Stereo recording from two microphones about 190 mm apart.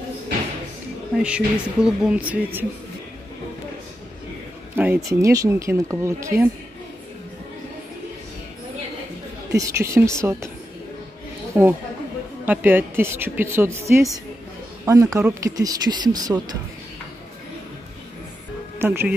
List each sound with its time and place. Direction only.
1.1 s speech: 5° right (ahead or behind)
4.7 s speech: 10° right (ahead or behind)
9.6 s speech: 15° right (ahead or behind)
11.6 s speech: 10° right (ahead or behind)
18.8 s speech: 10° right (ahead or behind)